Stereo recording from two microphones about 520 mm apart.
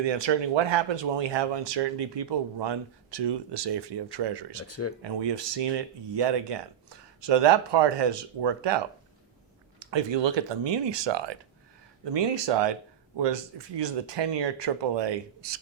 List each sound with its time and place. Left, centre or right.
0.0 s speech: right
4.7 s speech: left
5.0 s speech: right
9.8 s speech: right